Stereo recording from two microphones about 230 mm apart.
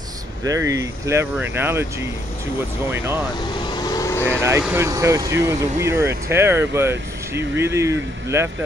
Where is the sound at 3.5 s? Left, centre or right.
Centre.